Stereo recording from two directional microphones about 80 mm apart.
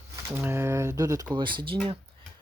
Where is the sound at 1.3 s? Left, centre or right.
Right.